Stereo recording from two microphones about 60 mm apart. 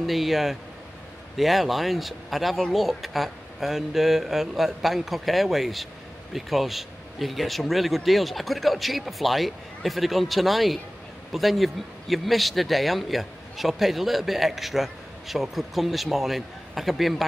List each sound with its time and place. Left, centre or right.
0.0 s speech: centre